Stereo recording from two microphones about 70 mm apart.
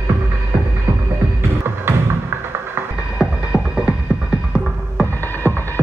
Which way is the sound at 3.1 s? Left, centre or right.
Centre.